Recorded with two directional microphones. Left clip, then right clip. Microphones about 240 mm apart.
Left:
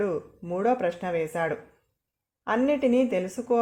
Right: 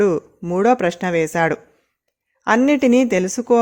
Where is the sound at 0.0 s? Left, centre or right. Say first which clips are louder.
Right 11 dB; right.